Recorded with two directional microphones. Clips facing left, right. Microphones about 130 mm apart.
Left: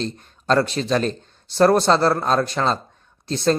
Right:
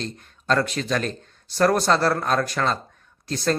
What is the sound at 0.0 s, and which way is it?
Speech, 30° left (ahead or behind).